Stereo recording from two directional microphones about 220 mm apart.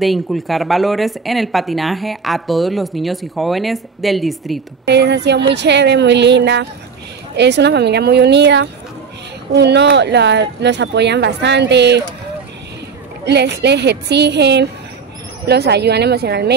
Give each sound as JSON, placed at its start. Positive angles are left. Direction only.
{"t": 0.0, "sound": "speech", "side_deg": 0}
{"t": 4.8, "sound": "speech", "side_deg": -50}
{"t": 13.2, "sound": "speech", "side_deg": -50}